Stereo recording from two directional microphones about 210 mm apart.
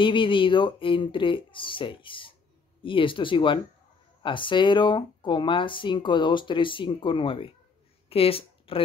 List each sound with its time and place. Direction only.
0.0 s speech: 25° left (ahead or behind)